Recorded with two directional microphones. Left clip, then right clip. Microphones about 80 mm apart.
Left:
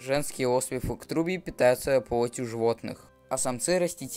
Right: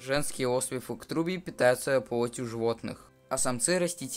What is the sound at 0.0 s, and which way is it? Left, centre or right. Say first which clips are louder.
Speech: left 2 dB; left.